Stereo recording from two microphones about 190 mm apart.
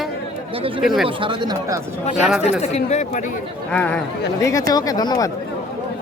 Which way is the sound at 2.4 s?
35° left (ahead or behind).